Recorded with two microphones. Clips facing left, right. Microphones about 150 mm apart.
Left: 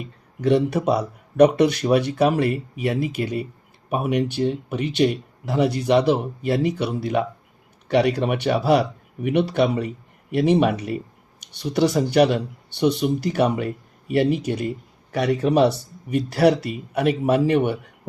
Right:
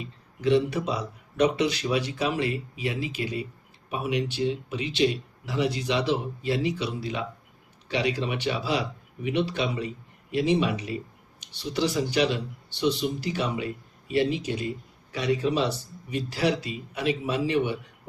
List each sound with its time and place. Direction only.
0.0 s speech: 55° left (ahead or behind)